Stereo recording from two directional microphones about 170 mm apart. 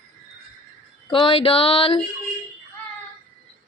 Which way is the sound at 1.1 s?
30° left (ahead or behind).